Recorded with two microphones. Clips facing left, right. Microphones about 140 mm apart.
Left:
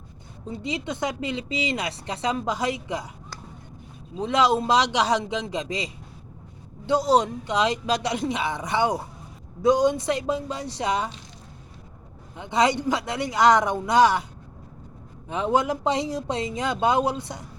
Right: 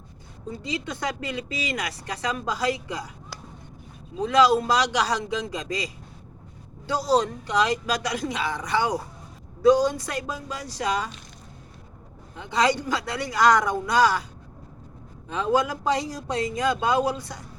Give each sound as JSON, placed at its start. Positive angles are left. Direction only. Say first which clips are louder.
{"t": 0.5, "sound": "speech", "louder": "left 2 dB", "side_deg": 20}
{"t": 4.2, "sound": "speech", "louder": "right 2 dB", "side_deg": 25}
{"t": 12.4, "sound": "speech", "louder": "left 1 dB", "side_deg": 20}
{"t": 15.3, "sound": "speech", "louder": "left 1 dB", "side_deg": 20}